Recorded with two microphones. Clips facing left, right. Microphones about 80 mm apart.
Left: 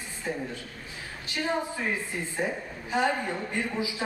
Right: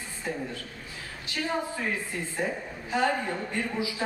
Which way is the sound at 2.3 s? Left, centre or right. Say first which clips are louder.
Even; centre.